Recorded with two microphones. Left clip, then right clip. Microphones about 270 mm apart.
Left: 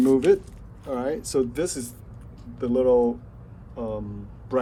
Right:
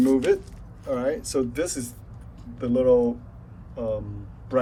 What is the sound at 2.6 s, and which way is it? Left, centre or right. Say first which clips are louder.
Speech: even; centre.